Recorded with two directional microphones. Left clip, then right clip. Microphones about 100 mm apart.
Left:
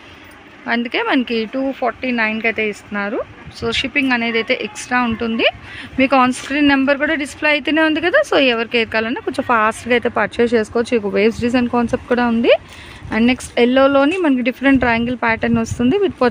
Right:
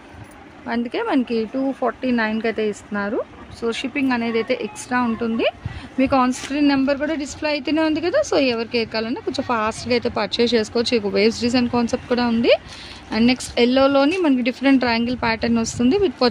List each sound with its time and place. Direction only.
0.7 s speech: 10° left (ahead or behind)
2.0 s speech: 10° right (ahead or behind)
3.1 s speech: 10° left (ahead or behind)
10.4 s speech: 20° left (ahead or behind)